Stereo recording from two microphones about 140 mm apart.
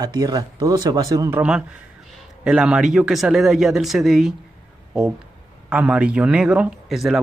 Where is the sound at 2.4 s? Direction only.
5° right (ahead or behind).